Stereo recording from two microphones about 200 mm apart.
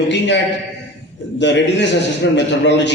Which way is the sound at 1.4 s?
60° left (ahead or behind).